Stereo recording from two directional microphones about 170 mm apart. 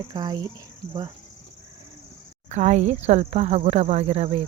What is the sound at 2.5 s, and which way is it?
Speech, 45° right (ahead or behind).